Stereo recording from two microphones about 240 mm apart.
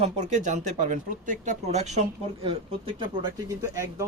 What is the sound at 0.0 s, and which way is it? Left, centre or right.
Speech, right.